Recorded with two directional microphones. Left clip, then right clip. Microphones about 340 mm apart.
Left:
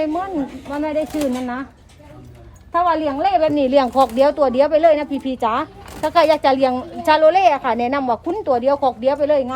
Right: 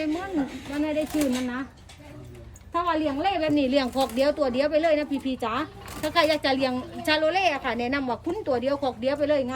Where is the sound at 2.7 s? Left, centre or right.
Centre.